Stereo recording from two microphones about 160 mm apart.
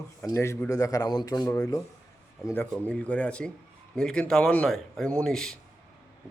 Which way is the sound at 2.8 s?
10° left (ahead or behind).